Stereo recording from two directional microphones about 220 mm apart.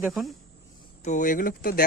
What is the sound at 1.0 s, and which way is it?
Speech, 35° left (ahead or behind).